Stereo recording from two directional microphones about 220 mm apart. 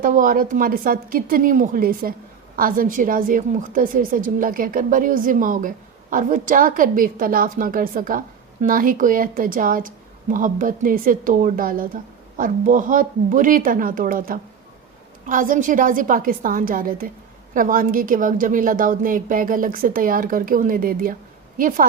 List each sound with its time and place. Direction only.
0.0 s a woman's voice: 35° right (ahead or behind)